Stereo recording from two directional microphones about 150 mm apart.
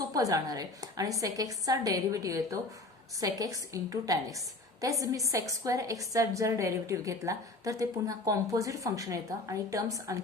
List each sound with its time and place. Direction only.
0.1 s a woman's voice: 25° right (ahead or behind)